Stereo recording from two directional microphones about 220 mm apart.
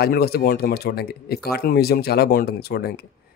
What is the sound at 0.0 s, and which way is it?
Speech, 45° left (ahead or behind).